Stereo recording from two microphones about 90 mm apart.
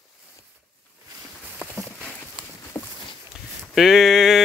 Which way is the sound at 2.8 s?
20° left (ahead or behind).